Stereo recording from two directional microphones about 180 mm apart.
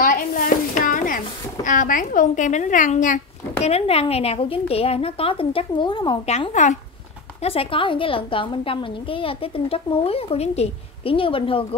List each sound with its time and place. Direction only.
0.0 s a sound: 50° left (ahead or behind)
3.6 s a woman's voice: 35° left (ahead or behind)
6.3 s speech: 40° left (ahead or behind)
7.4 s a woman's voice: 30° left (ahead or behind)